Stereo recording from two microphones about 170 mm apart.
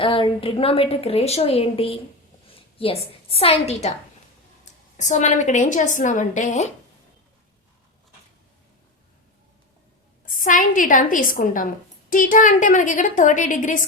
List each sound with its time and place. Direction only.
0.0 s a woman's voice: 30° left (ahead or behind)
10.2 s a woman's voice: 50° left (ahead or behind)